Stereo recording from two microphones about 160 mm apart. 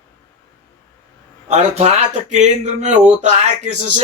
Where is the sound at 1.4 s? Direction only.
45° right (ahead or behind).